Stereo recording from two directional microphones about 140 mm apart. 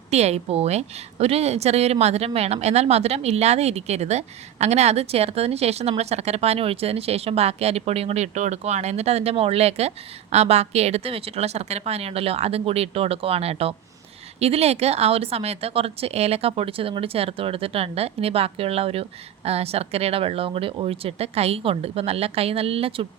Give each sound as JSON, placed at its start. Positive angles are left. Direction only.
{"t": 0.1, "sound": "speech", "side_deg": -50}